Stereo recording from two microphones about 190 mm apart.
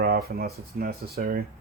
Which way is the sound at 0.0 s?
55° right (ahead or behind).